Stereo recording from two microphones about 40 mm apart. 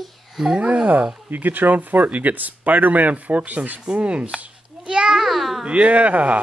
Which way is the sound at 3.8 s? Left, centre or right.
Right.